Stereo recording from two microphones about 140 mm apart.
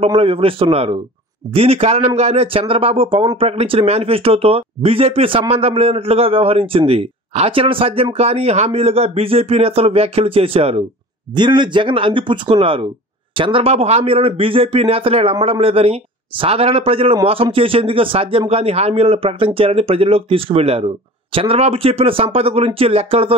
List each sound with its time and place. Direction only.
0.0 s a man's voice: 40° right (ahead or behind)
11.3 s a man's voice: 35° right (ahead or behind)